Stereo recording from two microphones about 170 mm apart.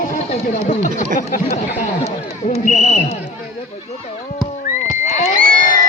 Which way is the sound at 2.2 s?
40° left (ahead or behind).